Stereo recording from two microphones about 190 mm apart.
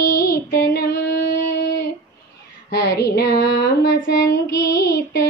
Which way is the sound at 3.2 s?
60° left (ahead or behind).